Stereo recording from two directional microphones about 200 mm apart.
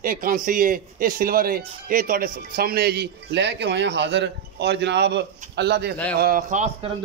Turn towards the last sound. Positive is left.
turn(degrees=-40)  # may be behind; listen again after turning